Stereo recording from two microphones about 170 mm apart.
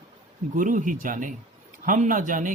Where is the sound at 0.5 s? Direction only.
50° right (ahead or behind).